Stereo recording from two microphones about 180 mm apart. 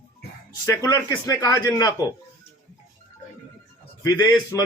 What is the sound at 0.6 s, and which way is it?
Speech, 20° left (ahead or behind).